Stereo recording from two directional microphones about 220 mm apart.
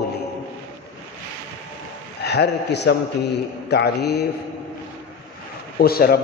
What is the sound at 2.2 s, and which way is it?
A man's voice, 50° left (ahead or behind).